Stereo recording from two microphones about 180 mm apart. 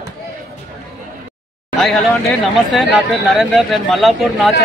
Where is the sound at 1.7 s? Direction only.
Centre (ahead or behind).